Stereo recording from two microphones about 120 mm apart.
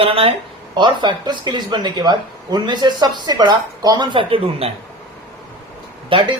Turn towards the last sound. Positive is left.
turn(degrees=-45)  # may be behind; listen again after turning